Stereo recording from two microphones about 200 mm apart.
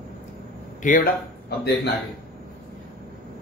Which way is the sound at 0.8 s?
40° left (ahead or behind).